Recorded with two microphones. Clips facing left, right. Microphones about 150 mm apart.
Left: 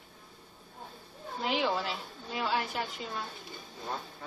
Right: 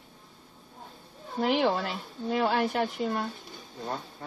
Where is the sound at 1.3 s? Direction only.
55° right (ahead or behind).